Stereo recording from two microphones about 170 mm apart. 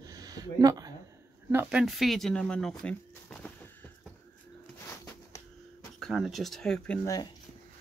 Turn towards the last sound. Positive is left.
turn(degrees=20)  # may be behind; listen again after turning